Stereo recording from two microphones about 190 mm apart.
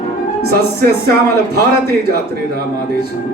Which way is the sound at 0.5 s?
55° right (ahead or behind).